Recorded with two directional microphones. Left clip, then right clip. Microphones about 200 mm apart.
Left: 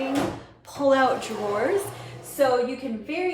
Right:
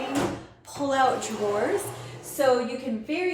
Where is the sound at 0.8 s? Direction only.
20° left (ahead or behind).